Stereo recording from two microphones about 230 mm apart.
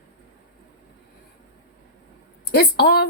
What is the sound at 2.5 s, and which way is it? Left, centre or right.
Speech, left.